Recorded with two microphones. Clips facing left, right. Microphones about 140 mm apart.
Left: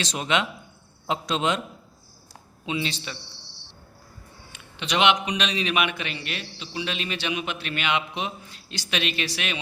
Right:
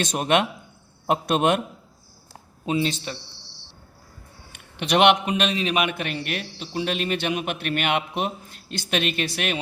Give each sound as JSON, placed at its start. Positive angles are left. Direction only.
{"t": 0.0, "sound": "a man's voice", "side_deg": -50}
{"t": 2.6, "sound": "speech", "side_deg": -45}
{"t": 4.5, "sound": "a man's voice", "side_deg": -60}